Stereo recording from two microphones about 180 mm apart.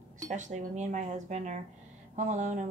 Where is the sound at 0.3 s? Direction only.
40° right (ahead or behind).